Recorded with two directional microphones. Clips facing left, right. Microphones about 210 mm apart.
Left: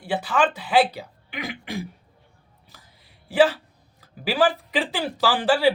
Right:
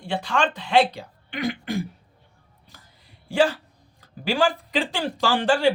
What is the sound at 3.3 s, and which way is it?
Speech, 5° left (ahead or behind).